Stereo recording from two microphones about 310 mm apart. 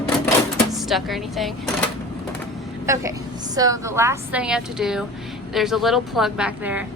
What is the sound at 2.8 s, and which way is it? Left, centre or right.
A woman's voice, centre.